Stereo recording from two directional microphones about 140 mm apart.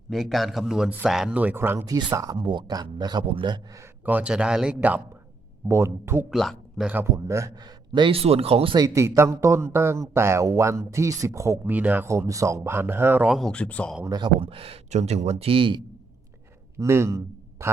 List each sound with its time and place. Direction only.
0.1 s speech: centre (ahead or behind); by 2.0 s 15° right (ahead or behind)
2.0 s a man's voice: 25° right (ahead or behind)
4.0 s speech: 10° right (ahead or behind)
6.3 s speech: centre (ahead or behind)
6.8 s a man's voice: 15° right (ahead or behind); by 8.7 s 45° right (ahead or behind)
8.7 s speech: 25° right (ahead or behind)
13.3 s speech: 5° left (ahead or behind)
14.0 s speech: 25° right (ahead or behind)
14.3 s speech: 45° right (ahead or behind)
16.7 s a sound: 20° right (ahead or behind)